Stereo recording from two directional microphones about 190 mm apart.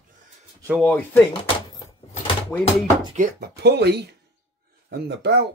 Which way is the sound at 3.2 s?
55° right (ahead or behind).